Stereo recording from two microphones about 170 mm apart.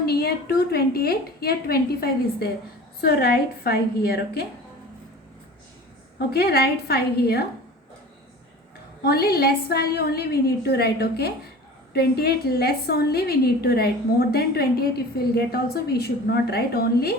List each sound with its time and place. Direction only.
0.0 s a woman's voice: 65° left (ahead or behind)
6.1 s a woman's voice: 70° left (ahead or behind)
9.0 s a woman's voice: 65° left (ahead or behind)